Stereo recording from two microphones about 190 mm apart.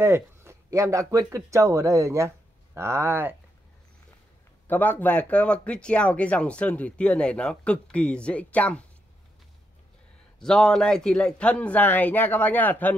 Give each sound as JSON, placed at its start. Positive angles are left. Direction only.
{"t": 0.0, "sound": "speech", "side_deg": -15}
{"t": 4.6, "sound": "speech", "side_deg": 10}
{"t": 10.4, "sound": "speech", "side_deg": 5}